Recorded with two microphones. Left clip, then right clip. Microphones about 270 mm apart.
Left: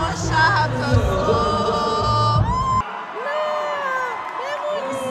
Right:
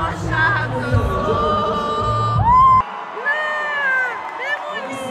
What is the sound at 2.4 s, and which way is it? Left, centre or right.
Music, right.